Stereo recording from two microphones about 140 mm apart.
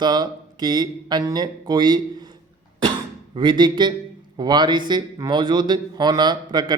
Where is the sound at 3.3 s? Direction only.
35° right (ahead or behind).